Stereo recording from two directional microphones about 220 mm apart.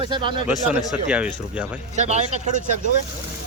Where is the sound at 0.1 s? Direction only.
20° right (ahead or behind).